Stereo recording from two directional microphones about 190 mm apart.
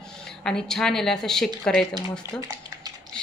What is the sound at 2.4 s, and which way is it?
Speech, 20° right (ahead or behind).